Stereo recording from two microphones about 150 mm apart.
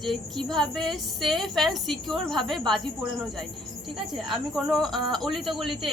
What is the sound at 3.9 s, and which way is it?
Speech, centre (ahead or behind).